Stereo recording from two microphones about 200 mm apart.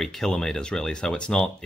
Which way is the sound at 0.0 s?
Centre (ahead or behind).